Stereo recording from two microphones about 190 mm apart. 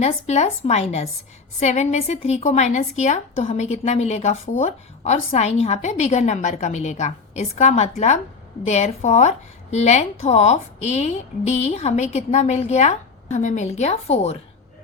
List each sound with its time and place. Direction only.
0.0 s a woman's voice: 35° left (ahead or behind)